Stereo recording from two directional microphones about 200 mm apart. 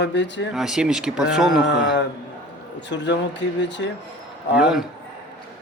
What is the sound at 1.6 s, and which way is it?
Speech, 60° left (ahead or behind).